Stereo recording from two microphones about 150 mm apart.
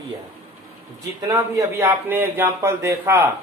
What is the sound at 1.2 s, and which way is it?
Speech, 20° right (ahead or behind).